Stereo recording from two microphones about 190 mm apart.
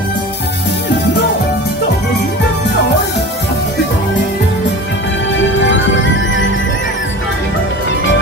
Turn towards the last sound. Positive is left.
turn(degrees=80)